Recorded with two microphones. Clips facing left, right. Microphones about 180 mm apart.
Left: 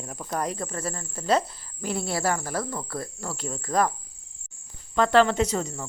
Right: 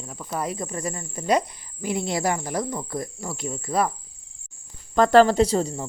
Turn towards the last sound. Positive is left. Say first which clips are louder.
# right 5 dB
turn(degrees=-30)  # may be behind; listen again after turning